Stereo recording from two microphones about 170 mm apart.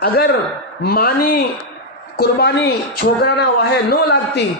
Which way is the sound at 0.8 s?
65° left (ahead or behind).